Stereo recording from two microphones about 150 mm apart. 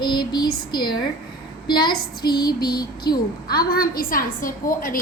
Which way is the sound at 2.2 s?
90° left.